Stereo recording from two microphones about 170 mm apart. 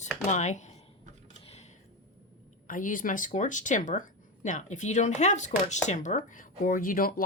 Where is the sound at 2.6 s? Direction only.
50° left (ahead or behind).